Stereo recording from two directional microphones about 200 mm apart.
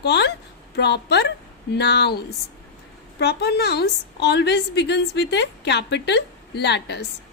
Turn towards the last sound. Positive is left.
turn(degrees=55)  # may be behind; listen again after turning